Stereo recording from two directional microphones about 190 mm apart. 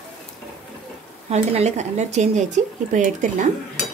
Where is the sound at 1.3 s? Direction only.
35° right (ahead or behind).